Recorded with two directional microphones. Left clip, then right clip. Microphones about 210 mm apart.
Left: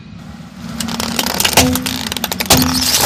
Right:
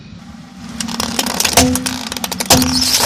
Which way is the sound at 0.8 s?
5° right (ahead or behind).